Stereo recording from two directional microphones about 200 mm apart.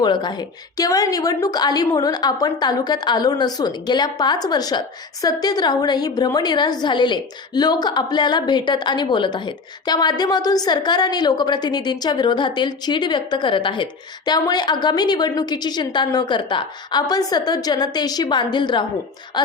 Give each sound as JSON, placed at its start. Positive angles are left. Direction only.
{"t": 0.0, "sound": "a woman's voice", "side_deg": 20}